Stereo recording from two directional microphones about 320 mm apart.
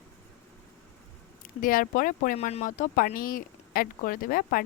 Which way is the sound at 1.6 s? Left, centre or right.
Left.